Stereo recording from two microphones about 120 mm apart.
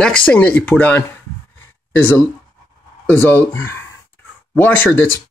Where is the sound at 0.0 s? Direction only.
10° left (ahead or behind).